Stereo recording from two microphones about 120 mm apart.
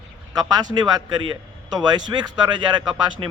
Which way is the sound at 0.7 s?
35° right (ahead or behind).